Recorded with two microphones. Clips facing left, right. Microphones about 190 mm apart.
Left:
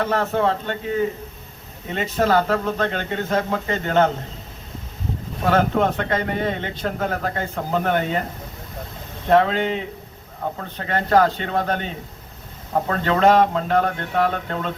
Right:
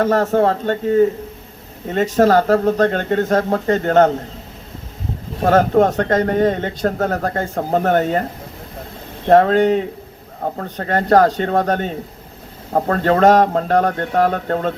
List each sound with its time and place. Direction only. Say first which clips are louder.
0.0 s speech: right 6 dB; 45° right (ahead or behind)
5.4 s speech: right 6 dB; 45° right (ahead or behind)
9.3 s speech: right 6 dB; 45° right (ahead or behind)